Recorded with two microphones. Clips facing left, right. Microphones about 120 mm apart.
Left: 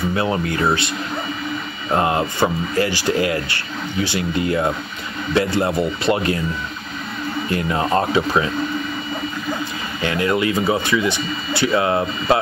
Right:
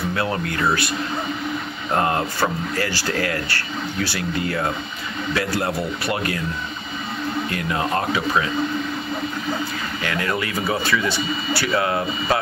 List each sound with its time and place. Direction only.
0.1 s speech: 20° left (ahead or behind)
1.9 s speech: 15° left (ahead or behind)
7.5 s speech: 25° left (ahead or behind)
10.0 s speech: 20° left (ahead or behind)